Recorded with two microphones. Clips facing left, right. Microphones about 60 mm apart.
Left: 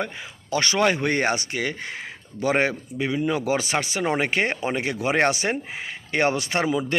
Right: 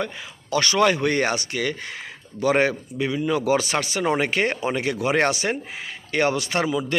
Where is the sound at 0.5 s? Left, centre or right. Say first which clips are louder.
Right 2 dB; left.